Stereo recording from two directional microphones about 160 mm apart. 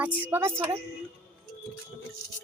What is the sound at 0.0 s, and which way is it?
Speech, 10° right (ahead or behind).